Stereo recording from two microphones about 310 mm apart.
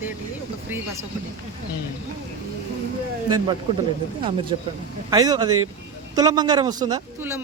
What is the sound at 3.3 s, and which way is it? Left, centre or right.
Speech, centre.